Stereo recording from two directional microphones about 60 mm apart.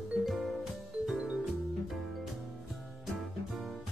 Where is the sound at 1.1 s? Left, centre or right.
Centre.